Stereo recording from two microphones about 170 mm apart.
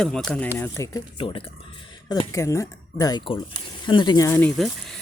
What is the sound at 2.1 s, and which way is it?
Speech, 20° left (ahead or behind).